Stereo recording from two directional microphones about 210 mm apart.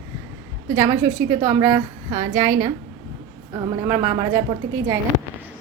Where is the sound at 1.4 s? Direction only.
15° right (ahead or behind).